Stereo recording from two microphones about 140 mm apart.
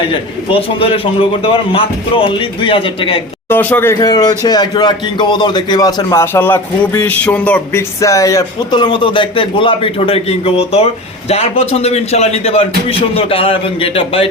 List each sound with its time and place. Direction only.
0.1 s a man's voice: 40° left (ahead or behind)
3.5 s speech: 15° left (ahead or behind)
4.0 s a man's voice: 30° left (ahead or behind)